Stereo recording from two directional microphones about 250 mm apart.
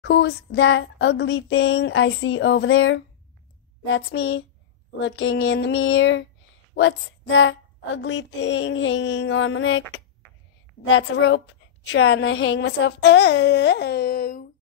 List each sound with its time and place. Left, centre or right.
0.0 s a woman's voice: left